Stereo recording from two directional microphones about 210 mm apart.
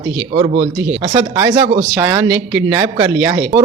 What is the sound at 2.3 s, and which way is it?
Speech, 55° right (ahead or behind).